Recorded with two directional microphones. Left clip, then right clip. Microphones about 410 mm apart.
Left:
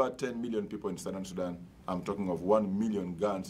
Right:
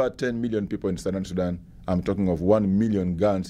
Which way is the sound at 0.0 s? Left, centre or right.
Right.